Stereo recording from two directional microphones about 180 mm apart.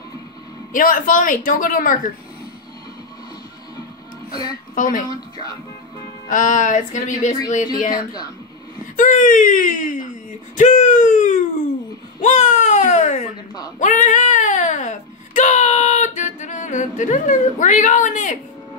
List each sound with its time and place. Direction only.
0.7 s speech: 50° left (ahead or behind)
4.7 s speech: 50° left (ahead or behind)
5.1 s speech: 20° left (ahead or behind)
6.2 s speech: 45° left (ahead or behind)
7.9 s speech: 20° left (ahead or behind)
8.9 s speech: 45° left (ahead or behind)
13.7 s a sound: 45° left (ahead or behind)